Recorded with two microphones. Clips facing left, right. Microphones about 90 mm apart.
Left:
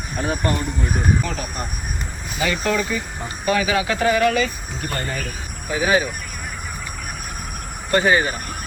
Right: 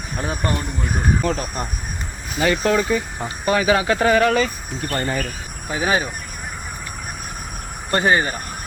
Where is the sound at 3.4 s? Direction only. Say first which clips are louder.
Right 2 dB; 35° right (ahead or behind).